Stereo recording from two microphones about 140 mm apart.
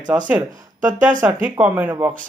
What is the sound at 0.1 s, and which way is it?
Speech, 10° right (ahead or behind).